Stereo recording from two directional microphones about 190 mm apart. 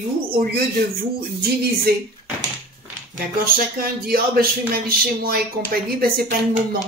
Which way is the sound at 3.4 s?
50° right (ahead or behind).